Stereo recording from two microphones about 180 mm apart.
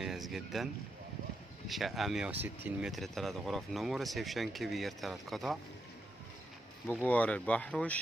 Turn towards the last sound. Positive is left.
turn(degrees=5)  # may be behind; listen again after turning